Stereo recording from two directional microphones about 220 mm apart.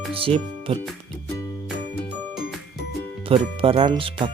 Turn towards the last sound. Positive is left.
turn(degrees=-25)  # may be behind; listen again after turning